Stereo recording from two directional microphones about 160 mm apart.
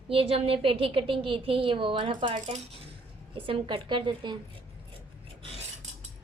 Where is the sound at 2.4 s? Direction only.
45° right (ahead or behind).